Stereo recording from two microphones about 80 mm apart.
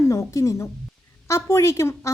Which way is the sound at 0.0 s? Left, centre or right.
Left.